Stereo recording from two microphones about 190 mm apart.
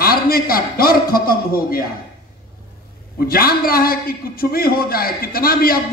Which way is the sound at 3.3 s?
50° left (ahead or behind).